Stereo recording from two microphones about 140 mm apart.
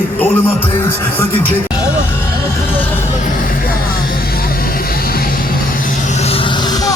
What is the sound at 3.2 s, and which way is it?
Vehicle, 85° left.